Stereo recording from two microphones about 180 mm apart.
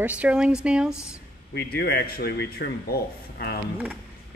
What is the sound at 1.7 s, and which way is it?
Speech, 60° left (ahead or behind).